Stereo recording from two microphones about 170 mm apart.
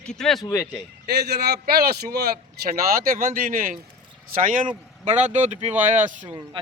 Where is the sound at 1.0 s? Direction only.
70° right (ahead or behind); by 5.7 s 40° right (ahead or behind).